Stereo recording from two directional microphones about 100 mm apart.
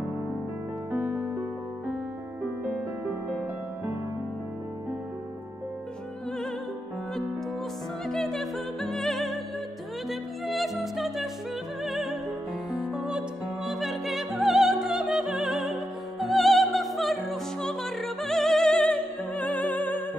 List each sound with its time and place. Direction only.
0.9 s music: 15° right (ahead or behind)
8.1 s music: 5° left (ahead or behind)